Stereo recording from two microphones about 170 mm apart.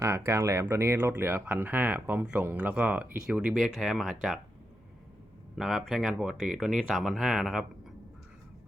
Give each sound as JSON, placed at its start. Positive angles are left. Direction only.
{"t": 0.0, "sound": "speech", "side_deg": -15}
{"t": 5.5, "sound": "speech", "side_deg": 0}